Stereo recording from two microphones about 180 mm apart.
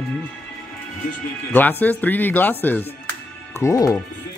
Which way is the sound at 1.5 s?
10° left (ahead or behind).